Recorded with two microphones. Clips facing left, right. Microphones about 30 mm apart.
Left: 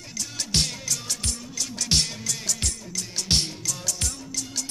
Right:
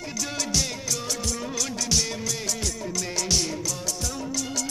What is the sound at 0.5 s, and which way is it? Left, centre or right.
Music, left.